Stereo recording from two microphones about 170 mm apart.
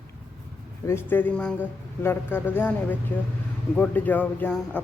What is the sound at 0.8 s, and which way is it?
Speech, 15° left (ahead or behind).